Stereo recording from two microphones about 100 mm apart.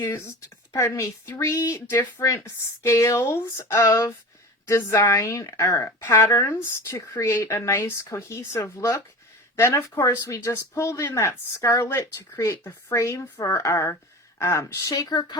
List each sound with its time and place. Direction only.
0.0 s a woman's voice: 30° left (ahead or behind)